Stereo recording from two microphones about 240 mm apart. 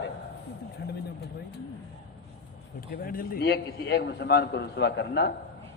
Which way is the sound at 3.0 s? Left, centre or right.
Left.